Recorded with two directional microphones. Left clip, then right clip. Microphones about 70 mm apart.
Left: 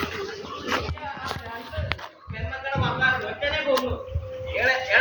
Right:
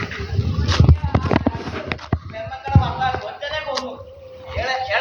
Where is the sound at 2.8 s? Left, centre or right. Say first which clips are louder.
Left 2 dB; right.